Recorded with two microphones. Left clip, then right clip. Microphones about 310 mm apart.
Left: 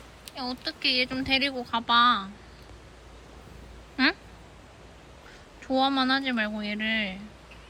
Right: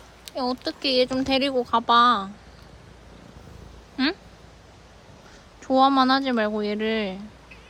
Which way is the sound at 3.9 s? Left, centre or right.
Centre.